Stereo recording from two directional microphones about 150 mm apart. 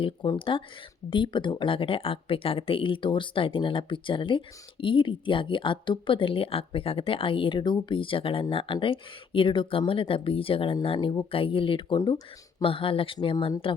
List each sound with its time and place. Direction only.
0.0 s speech: 35° left (ahead or behind)